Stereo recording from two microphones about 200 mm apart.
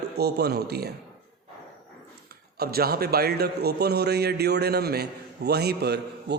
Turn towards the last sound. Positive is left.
turn(degrees=-55)  # may be behind; listen again after turning